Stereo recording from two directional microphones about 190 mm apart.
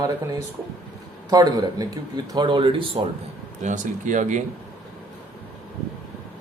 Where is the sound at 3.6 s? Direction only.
40° right (ahead or behind).